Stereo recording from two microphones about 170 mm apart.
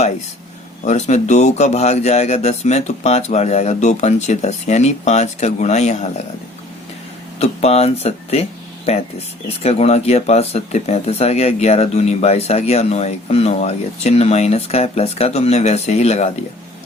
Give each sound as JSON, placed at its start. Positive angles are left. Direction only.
{"t": 0.9, "sound": "speech", "side_deg": 45}
{"t": 7.3, "sound": "speech", "side_deg": 40}